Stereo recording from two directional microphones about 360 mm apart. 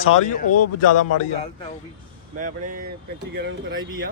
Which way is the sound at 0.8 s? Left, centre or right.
Left.